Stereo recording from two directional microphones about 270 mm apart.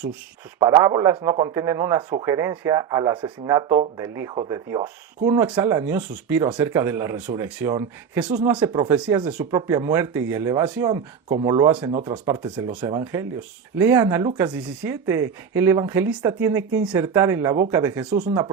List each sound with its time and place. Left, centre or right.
0.6 s speech: centre
18.3 s speech: centre